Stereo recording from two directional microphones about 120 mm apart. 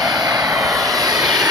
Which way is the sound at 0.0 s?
35° right (ahead or behind).